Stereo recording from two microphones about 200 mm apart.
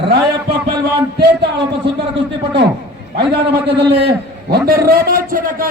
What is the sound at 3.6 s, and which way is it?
A man's voice, 55° right (ahead or behind).